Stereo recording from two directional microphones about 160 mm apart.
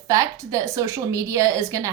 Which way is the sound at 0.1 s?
20° right (ahead or behind).